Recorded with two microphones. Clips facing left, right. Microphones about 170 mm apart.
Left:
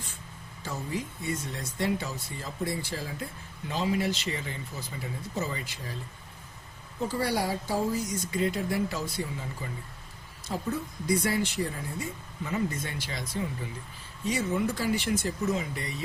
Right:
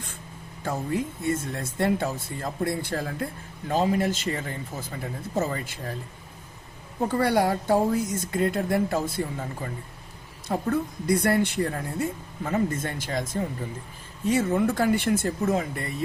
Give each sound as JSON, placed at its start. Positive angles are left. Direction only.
{"t": 0.6, "sound": "a woman's voice", "side_deg": -55}
{"t": 7.1, "sound": "a woman's voice", "side_deg": -60}